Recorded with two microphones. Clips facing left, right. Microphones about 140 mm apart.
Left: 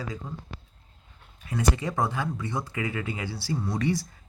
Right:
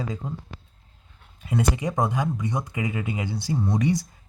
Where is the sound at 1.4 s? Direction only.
20° right (ahead or behind).